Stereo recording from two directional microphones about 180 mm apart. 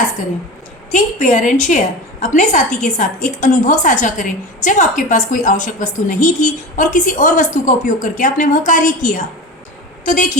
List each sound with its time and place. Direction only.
0.9 s a woman's voice: 45° left (ahead or behind)